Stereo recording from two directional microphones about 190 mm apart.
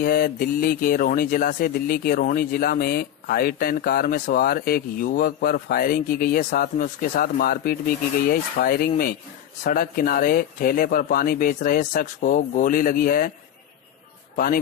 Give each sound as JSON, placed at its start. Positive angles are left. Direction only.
{"t": 0.0, "sound": "speech", "side_deg": 50}
{"t": 14.3, "sound": "speech", "side_deg": 50}